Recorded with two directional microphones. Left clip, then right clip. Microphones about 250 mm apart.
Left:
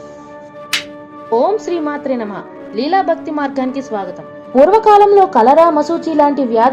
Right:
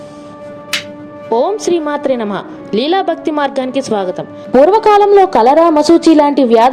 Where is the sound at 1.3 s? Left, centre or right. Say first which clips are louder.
Right 1 dB; right.